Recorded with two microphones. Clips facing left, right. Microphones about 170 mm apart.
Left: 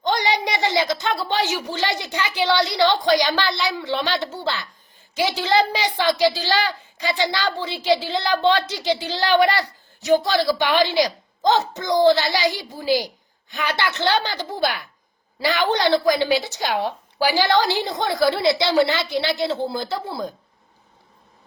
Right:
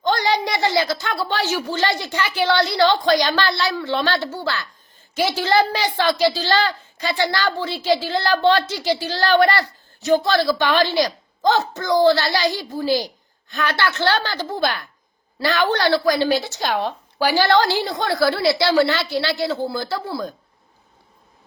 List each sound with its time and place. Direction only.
0.0 s speech: 15° left (ahead or behind)